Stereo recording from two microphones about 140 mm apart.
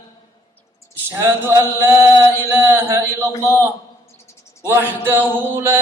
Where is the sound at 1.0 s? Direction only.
15° right (ahead or behind).